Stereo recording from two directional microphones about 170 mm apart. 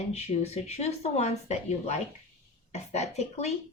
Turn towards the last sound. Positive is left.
turn(degrees=40)  # may be behind; listen again after turning